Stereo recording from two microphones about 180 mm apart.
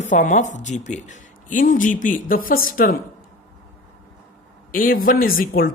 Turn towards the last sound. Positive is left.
turn(degrees=55)  # may be behind; listen again after turning